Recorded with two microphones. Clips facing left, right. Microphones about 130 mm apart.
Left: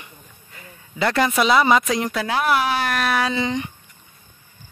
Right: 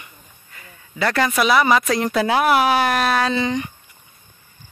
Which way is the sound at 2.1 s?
10° right (ahead or behind).